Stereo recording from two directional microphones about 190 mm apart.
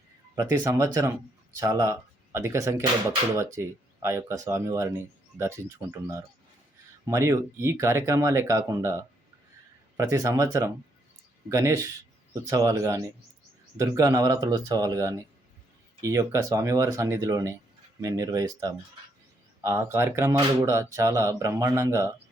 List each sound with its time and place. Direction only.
0.3 s speech: 15° right (ahead or behind)